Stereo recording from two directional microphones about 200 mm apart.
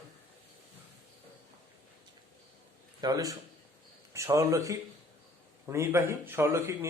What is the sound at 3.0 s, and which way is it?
Speech, 20° right (ahead or behind).